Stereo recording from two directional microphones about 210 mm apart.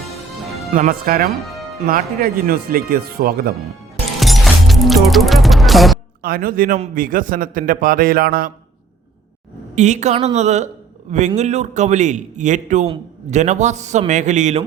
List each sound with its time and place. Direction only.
0.7 s a man's voice: 40° right (ahead or behind)
4.2 s music: centre (ahead or behind)
6.2 s a man's voice: 45° right (ahead or behind)
9.7 s a man's voice: 35° right (ahead or behind)